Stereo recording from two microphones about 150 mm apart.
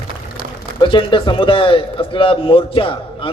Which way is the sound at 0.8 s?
35° left (ahead or behind).